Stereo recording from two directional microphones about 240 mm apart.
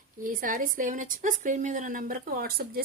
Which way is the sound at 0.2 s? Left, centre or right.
Right.